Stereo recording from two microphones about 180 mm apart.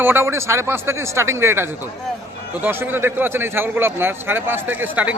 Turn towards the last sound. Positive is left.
turn(degrees=-10)  # may be behind; listen again after turning